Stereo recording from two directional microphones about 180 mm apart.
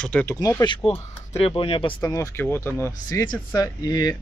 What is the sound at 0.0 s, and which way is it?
Speech, 5° left (ahead or behind).